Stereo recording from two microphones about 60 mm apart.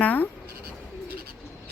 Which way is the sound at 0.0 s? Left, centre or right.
Left.